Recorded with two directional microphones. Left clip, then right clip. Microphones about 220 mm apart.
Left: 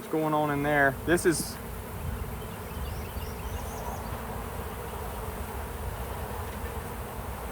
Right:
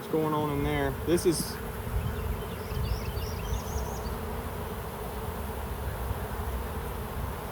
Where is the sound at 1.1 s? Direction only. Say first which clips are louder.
Left 1 dB; 25° left (ahead or behind).